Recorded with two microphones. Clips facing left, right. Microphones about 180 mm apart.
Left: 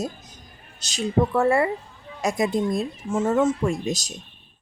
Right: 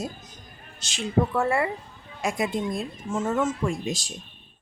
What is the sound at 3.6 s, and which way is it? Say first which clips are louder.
Speech: left 3 dB; 50° left (ahead or behind).